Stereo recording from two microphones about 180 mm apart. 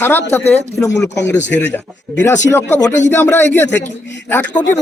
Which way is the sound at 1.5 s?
10° left (ahead or behind).